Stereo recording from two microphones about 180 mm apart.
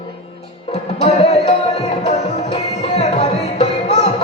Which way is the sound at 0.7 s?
35° left (ahead or behind).